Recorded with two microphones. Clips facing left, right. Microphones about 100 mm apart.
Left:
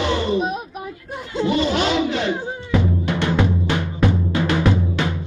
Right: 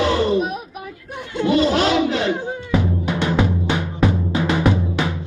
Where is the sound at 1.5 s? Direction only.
40° right (ahead or behind).